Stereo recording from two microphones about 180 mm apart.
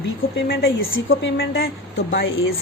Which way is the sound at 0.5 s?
90° left.